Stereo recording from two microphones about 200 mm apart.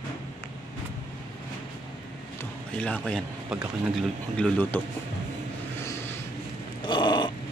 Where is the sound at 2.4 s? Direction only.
5° left (ahead or behind).